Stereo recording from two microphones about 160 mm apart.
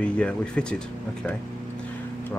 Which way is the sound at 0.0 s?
5° left (ahead or behind).